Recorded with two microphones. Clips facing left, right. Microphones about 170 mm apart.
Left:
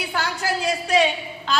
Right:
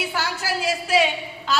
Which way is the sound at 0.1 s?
5° right (ahead or behind).